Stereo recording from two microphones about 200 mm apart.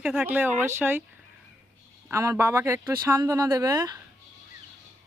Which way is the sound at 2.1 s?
15° right (ahead or behind).